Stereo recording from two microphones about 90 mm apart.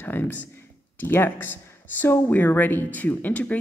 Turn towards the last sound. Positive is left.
turn(degrees=15)  # may be behind; listen again after turning